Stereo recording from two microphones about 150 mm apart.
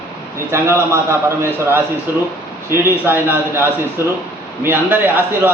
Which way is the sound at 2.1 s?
15° right (ahead or behind).